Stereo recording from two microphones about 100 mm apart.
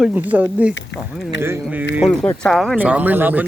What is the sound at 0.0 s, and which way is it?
A man's voice, 15° right (ahead or behind).